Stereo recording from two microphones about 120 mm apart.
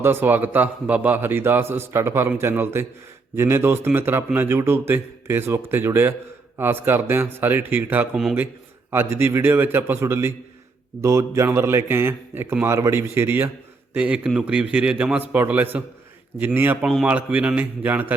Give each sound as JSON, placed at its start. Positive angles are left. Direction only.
{"t": 0.0, "sound": "a man's voice", "side_deg": -20}
{"t": 16.8, "sound": "a man's voice", "side_deg": -5}